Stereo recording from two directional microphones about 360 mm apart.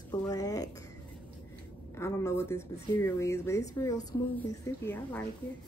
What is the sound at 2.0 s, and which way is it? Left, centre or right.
Speech, centre.